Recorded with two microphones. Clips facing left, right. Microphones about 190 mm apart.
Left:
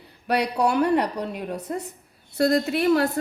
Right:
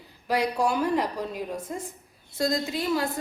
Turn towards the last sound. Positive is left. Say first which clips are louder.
# left 7 dB
turn(degrees=65)  # may be behind; listen again after turning